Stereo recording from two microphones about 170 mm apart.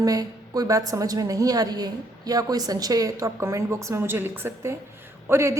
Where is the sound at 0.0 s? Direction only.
20° right (ahead or behind).